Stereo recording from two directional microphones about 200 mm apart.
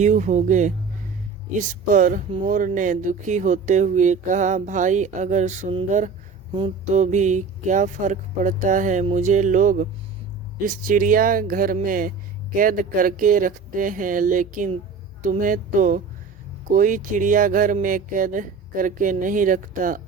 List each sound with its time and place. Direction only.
0.0 s speech: 35° right (ahead or behind)
1.7 s speech: 40° right (ahead or behind)